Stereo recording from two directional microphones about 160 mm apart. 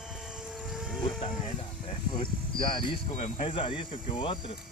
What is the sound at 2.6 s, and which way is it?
Speech, 30° left (ahead or behind).